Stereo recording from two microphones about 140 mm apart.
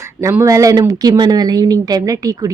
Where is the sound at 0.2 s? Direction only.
20° right (ahead or behind).